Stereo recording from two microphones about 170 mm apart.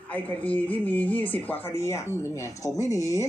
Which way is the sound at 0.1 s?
10° left (ahead or behind).